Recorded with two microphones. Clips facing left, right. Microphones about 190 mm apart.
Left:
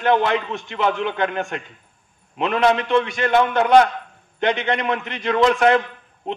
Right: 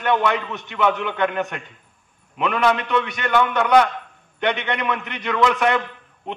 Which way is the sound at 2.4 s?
30° left (ahead or behind).